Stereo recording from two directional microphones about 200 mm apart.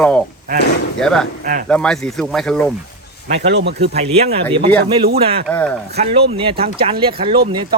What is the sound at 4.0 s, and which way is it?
Speech, 30° right (ahead or behind).